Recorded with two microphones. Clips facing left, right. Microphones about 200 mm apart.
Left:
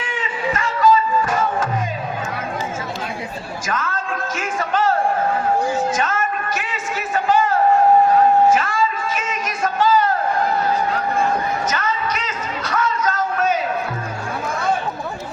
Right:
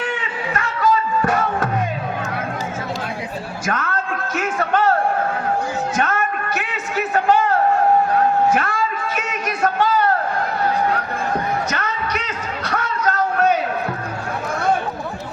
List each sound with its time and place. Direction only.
0.0 s music: 65° right (ahead or behind)
3.7 s music: 65° right (ahead or behind)
6.0 s a sound: 60° right (ahead or behind)
8.1 s music: 60° right (ahead or behind)